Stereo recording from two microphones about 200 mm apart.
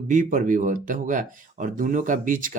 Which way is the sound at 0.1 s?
40° right (ahead or behind).